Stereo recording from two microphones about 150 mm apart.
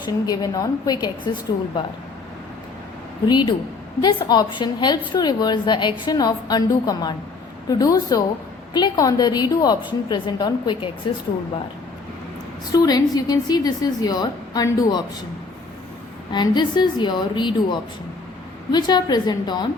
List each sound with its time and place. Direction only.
0.0 s a woman's voice: 25° left (ahead or behind)
3.2 s a woman's voice: 30° left (ahead or behind)
12.7 s a woman's voice: 25° left (ahead or behind)
16.3 s a woman's voice: 30° left (ahead or behind)